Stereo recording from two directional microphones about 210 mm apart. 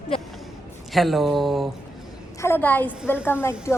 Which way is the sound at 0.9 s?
Centre (ahead or behind).